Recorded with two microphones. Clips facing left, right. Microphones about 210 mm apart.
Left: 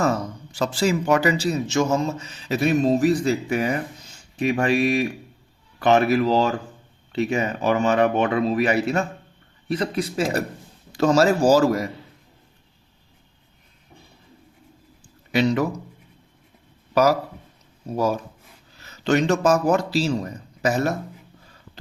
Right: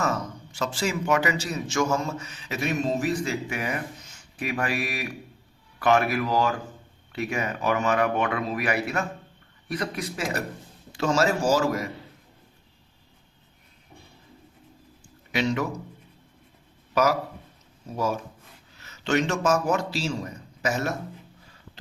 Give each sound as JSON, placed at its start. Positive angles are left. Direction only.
{"t": 0.5, "sound": "a man's voice", "side_deg": 35}
{"t": 15.3, "sound": "speech", "side_deg": 35}
{"t": 16.9, "sound": "a man's voice", "side_deg": 35}